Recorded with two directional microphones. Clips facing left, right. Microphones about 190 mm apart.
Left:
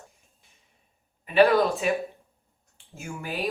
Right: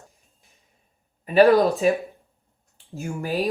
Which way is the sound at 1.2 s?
40° right (ahead or behind).